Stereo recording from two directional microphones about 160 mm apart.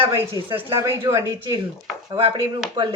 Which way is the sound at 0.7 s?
15° right (ahead or behind).